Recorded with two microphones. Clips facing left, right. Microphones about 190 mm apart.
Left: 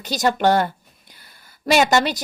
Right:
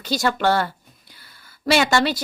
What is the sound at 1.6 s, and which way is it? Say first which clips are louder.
Speech: left 2 dB; 45° left (ahead or behind).